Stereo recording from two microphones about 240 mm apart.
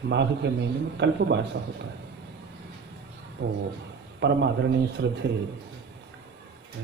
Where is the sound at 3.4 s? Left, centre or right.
Right.